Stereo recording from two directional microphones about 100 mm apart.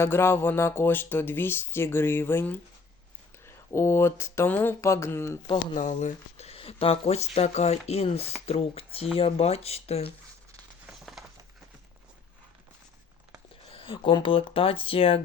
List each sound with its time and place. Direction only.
0.0 s speech: 25° left (ahead or behind)
5.9 s speech: 90° left
10.8 s a sound: 5° right (ahead or behind)
13.7 s speech: 65° left (ahead or behind)